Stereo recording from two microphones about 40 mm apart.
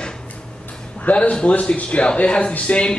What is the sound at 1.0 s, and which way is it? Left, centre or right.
A man's voice, left.